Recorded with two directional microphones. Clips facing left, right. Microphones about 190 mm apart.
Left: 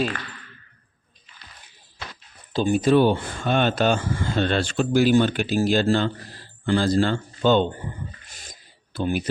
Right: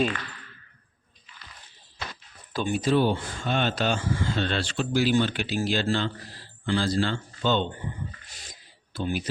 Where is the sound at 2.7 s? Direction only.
55° left (ahead or behind).